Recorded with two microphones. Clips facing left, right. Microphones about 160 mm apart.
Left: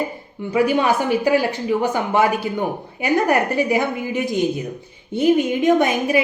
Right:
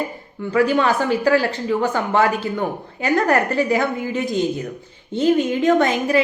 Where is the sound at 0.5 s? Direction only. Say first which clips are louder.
Even; 15° left (ahead or behind).